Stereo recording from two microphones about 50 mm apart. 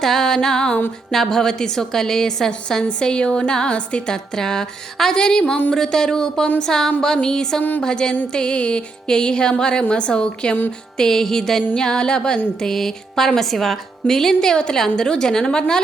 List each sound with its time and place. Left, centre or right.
0.0 s a woman's voice: centre